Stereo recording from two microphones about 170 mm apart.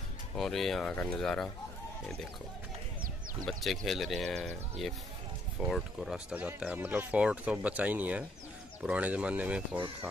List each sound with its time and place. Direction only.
0.4 s speech: centre (ahead or behind)
3.4 s speech: centre (ahead or behind)